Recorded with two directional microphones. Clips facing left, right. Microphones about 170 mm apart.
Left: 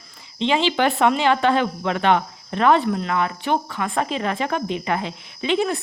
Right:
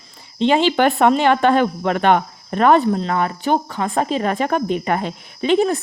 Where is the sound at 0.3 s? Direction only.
45° right (ahead or behind).